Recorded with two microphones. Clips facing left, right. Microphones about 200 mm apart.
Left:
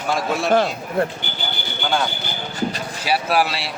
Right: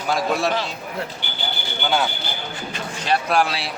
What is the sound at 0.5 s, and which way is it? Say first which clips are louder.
Speech: left 8 dB; 50° left (ahead or behind).